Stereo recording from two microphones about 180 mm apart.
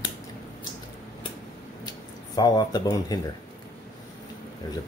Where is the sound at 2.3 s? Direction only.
20° left (ahead or behind).